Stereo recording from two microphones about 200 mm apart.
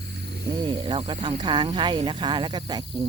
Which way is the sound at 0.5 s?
25° right (ahead or behind).